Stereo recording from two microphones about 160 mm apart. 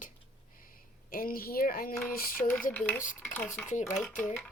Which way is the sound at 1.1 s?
65° left (ahead or behind).